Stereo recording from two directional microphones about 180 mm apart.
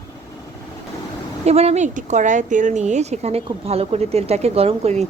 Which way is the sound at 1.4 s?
35° right (ahead or behind).